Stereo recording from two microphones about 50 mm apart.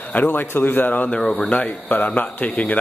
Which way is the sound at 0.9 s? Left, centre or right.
Left.